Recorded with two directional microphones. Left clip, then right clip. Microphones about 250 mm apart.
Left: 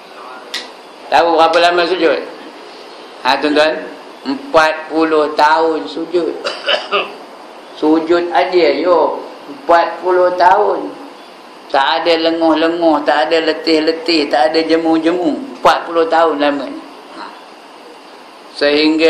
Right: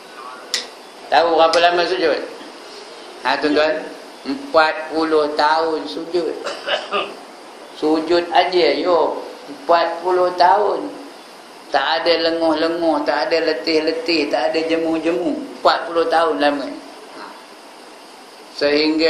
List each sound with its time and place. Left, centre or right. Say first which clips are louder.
1.1 s a man's voice: left 4 dB; centre
3.2 s a man's voice: left 5 dB; centre
6.4 s a sound: left 6 dB; left
7.9 s a man's voice: left 3 dB; centre
11.7 s a man's voice: left 4 dB; centre; by 15.1 s left
15.6 s a man's voice: left 4 dB; centre
18.6 s a man's voice: left 4 dB; centre